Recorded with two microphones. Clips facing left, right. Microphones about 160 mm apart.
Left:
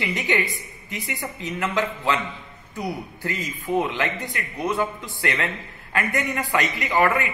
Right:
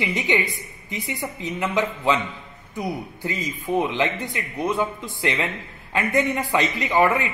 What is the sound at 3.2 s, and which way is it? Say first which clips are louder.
A man's voice: right 1 dB; 20° right (ahead or behind).